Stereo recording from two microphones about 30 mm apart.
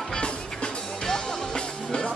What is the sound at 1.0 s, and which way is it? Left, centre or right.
Music, left.